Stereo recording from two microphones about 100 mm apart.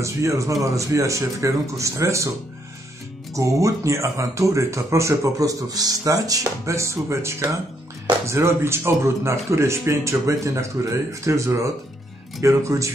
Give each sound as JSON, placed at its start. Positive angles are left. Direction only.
{"t": 0.0, "sound": "speech", "side_deg": -30}
{"t": 3.3, "sound": "speech", "side_deg": -30}